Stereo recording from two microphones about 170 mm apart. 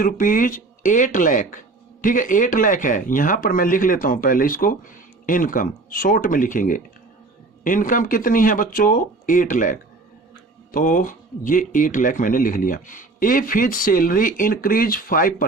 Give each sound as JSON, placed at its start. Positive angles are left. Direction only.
{"t": 0.0, "sound": "speech", "side_deg": 50}